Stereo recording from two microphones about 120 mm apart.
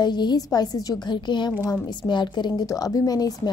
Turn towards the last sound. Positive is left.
turn(degrees=30)  # may be behind; listen again after turning